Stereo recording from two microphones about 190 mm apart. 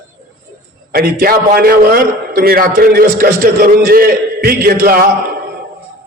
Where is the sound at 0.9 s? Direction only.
50° right (ahead or behind).